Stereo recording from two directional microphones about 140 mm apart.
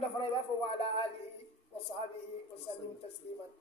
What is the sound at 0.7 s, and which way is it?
Speech, 40° left (ahead or behind).